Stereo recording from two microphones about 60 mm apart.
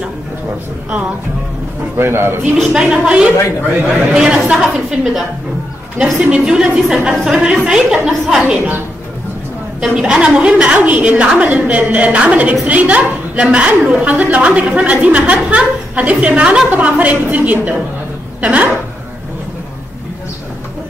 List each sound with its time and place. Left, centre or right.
2.0 s a man's voice: right
2.5 s a woman's voice: centre
6.4 s a woman's voice: centre
9.8 s a woman's voice: centre